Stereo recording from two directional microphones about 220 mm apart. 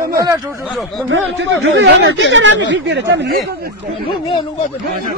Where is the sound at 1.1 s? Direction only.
60° right (ahead or behind).